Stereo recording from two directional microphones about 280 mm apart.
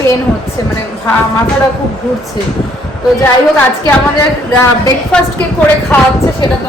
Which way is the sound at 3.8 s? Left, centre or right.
Centre.